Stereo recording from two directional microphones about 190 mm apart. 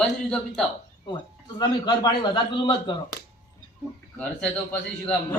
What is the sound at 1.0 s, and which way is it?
A man's voice, 25° left (ahead or behind).